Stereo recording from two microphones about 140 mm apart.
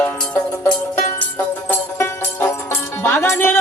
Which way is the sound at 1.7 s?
15° left (ahead or behind).